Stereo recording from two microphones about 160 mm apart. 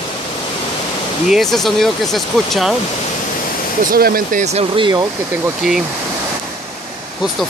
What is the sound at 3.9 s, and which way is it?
Speech, 65° right (ahead or behind).